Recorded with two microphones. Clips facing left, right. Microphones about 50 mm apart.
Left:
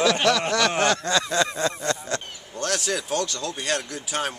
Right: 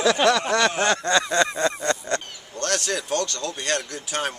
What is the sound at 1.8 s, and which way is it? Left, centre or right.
Goose, centre.